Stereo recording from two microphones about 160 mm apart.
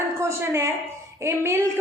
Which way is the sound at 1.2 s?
15° right (ahead or behind).